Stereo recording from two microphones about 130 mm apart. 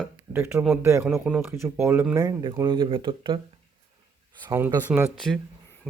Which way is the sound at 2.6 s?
40° right (ahead or behind).